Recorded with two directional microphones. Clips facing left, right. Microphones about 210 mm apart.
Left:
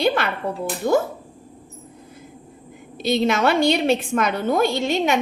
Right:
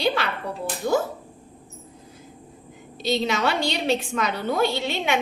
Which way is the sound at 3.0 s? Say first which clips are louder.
Left 5 dB; 55° left (ahead or behind).